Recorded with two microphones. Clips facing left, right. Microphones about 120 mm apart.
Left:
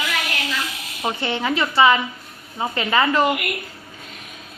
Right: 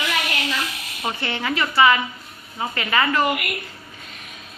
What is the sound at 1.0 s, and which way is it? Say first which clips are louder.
A woman's voice: left 3 dB; 20° left (ahead or behind).